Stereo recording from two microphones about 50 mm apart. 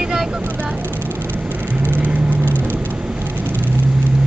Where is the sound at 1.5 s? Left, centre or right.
Right.